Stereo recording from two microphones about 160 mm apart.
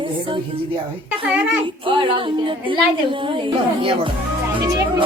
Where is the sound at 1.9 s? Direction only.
30° right (ahead or behind).